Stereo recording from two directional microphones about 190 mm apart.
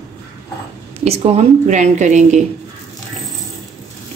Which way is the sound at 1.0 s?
35° right (ahead or behind).